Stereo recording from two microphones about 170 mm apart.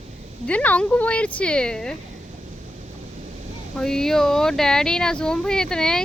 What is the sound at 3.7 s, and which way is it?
Speech, 5° left (ahead or behind).